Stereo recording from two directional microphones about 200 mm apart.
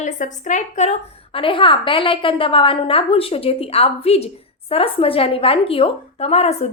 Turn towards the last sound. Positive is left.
turn(degrees=30)  # may be behind; listen again after turning